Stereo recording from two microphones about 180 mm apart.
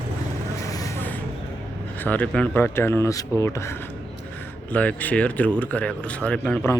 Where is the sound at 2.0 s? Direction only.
10° left (ahead or behind).